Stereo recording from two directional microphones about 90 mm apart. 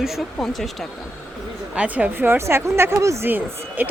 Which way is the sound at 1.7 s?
15° right (ahead or behind).